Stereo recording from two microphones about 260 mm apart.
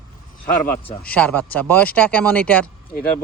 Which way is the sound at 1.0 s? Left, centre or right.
Centre.